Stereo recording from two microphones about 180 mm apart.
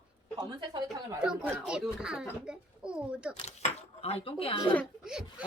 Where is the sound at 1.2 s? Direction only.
5° right (ahead or behind).